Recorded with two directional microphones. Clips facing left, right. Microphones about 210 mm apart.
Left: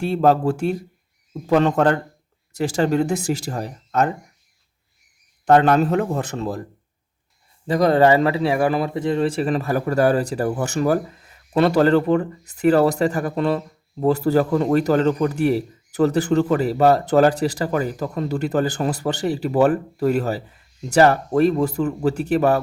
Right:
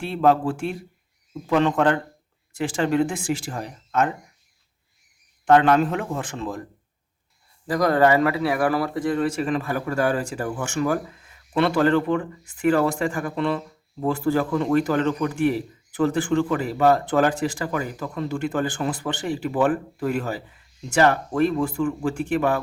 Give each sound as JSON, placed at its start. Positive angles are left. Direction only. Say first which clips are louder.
{"t": 0.0, "sound": "a man's voice", "louder": "left 3 dB", "side_deg": 40}
{"t": 5.5, "sound": "a man's voice", "louder": "left 2 dB", "side_deg": 40}
{"t": 7.7, "sound": "a man's voice", "louder": "left 3 dB", "side_deg": 25}